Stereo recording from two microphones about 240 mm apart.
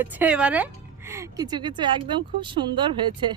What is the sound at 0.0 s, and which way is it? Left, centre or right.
A woman's voice, centre.